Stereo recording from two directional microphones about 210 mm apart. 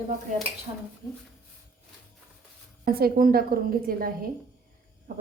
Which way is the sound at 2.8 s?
45° right (ahead or behind).